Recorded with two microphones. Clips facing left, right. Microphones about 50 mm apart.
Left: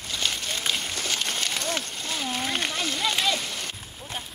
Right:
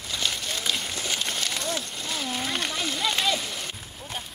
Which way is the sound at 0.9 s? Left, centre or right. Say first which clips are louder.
Left 1 dB; centre.